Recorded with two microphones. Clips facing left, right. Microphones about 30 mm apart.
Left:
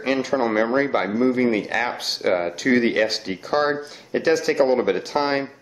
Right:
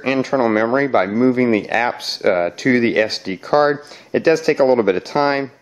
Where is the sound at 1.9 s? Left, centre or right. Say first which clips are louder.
Right 4 dB; centre.